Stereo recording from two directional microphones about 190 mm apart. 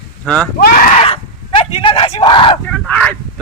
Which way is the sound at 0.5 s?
55° left (ahead or behind).